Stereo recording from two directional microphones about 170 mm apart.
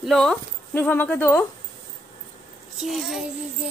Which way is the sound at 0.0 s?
Centre (ahead or behind).